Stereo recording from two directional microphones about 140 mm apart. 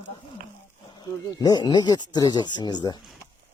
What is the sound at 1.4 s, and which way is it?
Speech, 30° left (ahead or behind).